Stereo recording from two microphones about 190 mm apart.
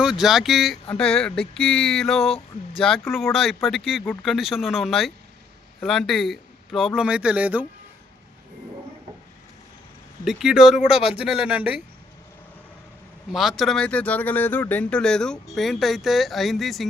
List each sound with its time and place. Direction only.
0.0 s speech: 5° right (ahead or behind)
2.2 s speech: 30° left (ahead or behind)
3.3 s speech: centre (ahead or behind)
10.2 s speech: centre (ahead or behind)
13.3 s speech: centre (ahead or behind)